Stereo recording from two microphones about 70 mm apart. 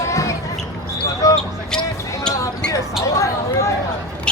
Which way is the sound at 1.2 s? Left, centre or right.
Left.